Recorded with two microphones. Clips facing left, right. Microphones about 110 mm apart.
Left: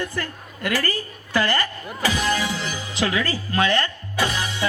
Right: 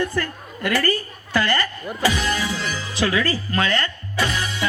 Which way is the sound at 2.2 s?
20° left (ahead or behind).